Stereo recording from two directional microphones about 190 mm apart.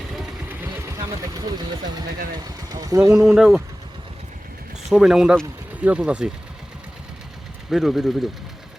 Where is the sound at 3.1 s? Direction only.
5° right (ahead or behind).